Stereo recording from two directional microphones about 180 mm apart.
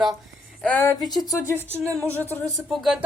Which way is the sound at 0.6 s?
10° left (ahead or behind).